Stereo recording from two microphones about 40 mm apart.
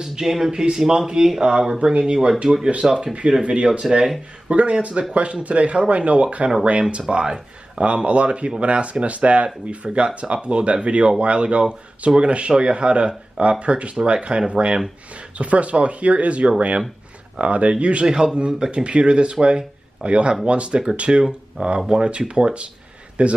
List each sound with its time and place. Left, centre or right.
0.0 s speech: centre
3.8 s speech: centre
4.5 s speech: right
7.8 s speech: right